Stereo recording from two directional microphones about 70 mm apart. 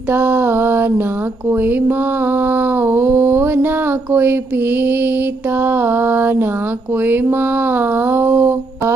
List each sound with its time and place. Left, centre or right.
0.1 s mantra: right